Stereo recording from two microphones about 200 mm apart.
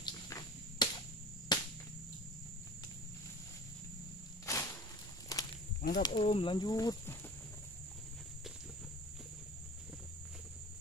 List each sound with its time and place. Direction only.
0.0 s cricket: 20° left (ahead or behind)
4.5 s walk: 15° left (ahead or behind)
5.8 s snake: 45° left (ahead or behind)
6.0 s speech: 25° left (ahead or behind)